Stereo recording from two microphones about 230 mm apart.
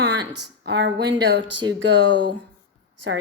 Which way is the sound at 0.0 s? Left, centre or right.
Right.